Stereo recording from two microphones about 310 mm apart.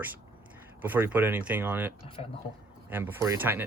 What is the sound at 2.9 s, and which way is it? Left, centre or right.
Speech, centre.